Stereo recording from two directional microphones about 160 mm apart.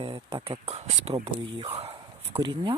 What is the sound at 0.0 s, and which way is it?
Speech, 35° right (ahead or behind).